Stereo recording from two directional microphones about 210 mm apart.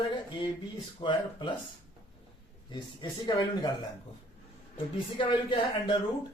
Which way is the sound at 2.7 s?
20° left (ahead or behind).